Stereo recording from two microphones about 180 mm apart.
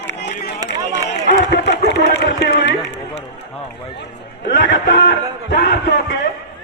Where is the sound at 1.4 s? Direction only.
70° left (ahead or behind).